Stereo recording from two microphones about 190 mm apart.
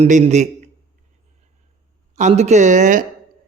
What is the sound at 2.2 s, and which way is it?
Speech, 35° right (ahead or behind).